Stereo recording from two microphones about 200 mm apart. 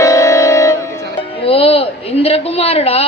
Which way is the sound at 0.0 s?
15° left (ahead or behind).